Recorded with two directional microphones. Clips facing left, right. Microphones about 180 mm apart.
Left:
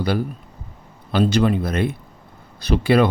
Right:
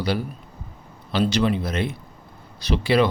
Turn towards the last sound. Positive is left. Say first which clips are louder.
# left 3 dB
turn(degrees=50)  # may be behind; listen again after turning